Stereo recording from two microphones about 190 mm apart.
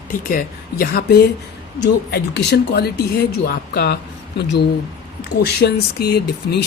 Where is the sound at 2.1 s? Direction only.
65° left (ahead or behind).